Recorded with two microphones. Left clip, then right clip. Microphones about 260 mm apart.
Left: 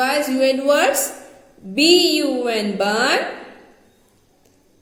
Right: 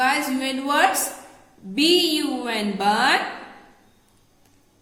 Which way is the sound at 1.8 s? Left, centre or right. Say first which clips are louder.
Left 5 dB; right.